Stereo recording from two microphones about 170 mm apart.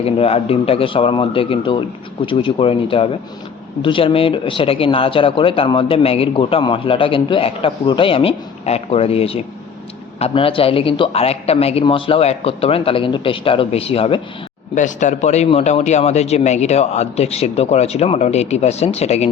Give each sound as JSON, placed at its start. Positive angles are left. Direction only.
{"t": 0.0, "sound": "speech", "side_deg": 35}
{"t": 14.8, "sound": "speech", "side_deg": 45}